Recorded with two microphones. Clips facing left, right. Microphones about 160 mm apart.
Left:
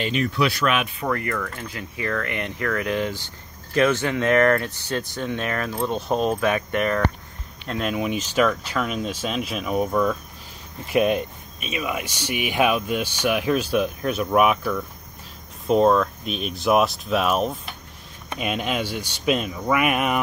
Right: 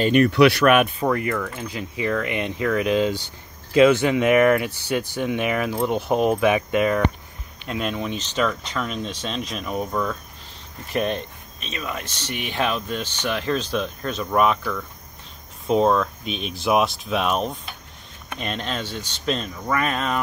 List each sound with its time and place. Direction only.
0.1 s speech: 65° right (ahead or behind)
1.0 s speech: 15° right (ahead or behind)
7.9 s speech: 10° left (ahead or behind)
15.6 s speech: centre (ahead or behind)